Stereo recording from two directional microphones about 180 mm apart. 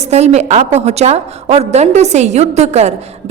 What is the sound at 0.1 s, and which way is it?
A woman's voice, 35° right (ahead or behind).